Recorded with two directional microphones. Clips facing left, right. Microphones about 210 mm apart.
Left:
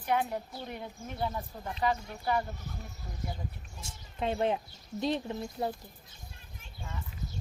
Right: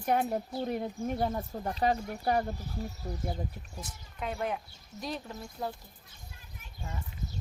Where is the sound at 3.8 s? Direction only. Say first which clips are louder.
Left 4 dB; 25° left (ahead or behind).